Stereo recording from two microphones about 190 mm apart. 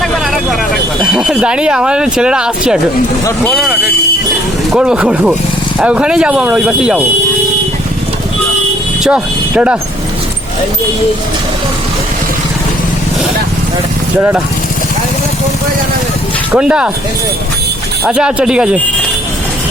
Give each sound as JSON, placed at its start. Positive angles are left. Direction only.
{"t": 1.0, "sound": "speech", "side_deg": -5}
{"t": 4.7, "sound": "speech", "side_deg": -5}
{"t": 9.0, "sound": "speech", "side_deg": -5}
{"t": 14.2, "sound": "speech", "side_deg": -10}
{"t": 16.5, "sound": "speech", "side_deg": -5}
{"t": 18.0, "sound": "speech", "side_deg": -5}